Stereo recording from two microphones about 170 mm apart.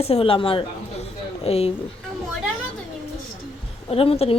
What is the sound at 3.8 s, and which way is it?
Speech, 35° left (ahead or behind).